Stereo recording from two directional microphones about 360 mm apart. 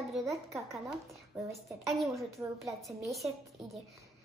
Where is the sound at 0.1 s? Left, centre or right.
Centre.